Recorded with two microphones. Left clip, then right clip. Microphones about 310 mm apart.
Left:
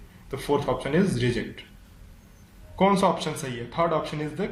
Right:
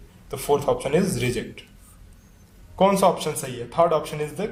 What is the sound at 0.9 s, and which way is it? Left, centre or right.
Speech, right.